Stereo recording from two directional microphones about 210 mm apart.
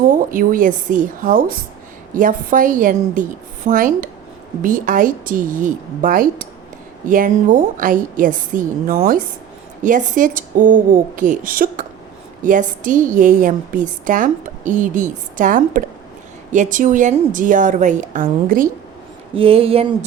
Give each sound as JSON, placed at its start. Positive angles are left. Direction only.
{"t": 0.3, "sound": "a woman's voice", "side_deg": -40}
{"t": 19.4, "sound": "speech", "side_deg": -25}